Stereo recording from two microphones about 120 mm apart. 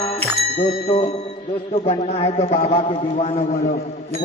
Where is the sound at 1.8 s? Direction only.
50° left (ahead or behind).